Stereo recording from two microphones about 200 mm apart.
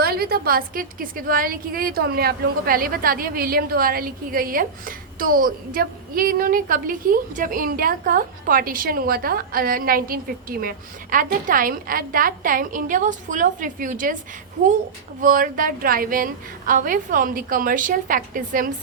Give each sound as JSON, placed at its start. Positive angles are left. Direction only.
{"t": 0.0, "sound": "a woman's voice", "side_deg": -50}
{"t": 15.2, "sound": "a woman's voice", "side_deg": -45}